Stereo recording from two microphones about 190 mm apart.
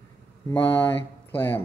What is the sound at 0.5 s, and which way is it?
Speech, 10° left (ahead or behind).